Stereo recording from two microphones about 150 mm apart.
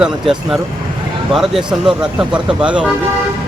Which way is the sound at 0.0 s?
5° right (ahead or behind).